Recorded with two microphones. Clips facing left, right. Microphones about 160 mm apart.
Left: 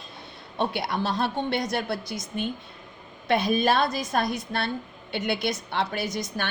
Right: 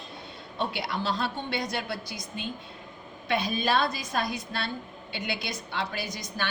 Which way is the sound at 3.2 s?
45° left (ahead or behind).